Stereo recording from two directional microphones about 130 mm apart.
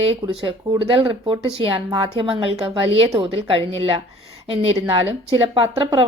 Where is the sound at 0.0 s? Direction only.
45° right (ahead or behind).